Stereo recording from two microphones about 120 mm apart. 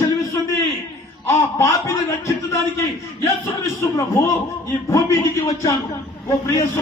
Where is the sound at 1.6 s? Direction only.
25° left (ahead or behind).